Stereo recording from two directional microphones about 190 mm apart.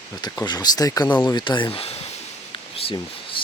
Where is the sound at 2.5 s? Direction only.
30° left (ahead or behind).